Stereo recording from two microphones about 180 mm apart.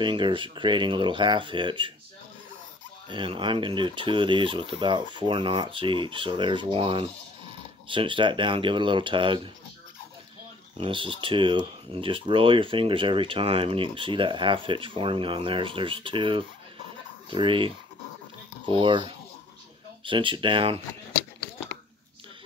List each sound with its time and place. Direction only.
0.0 s speech: 25° right (ahead or behind)
3.1 s speech: 25° right (ahead or behind)
10.8 s speech: 30° right (ahead or behind)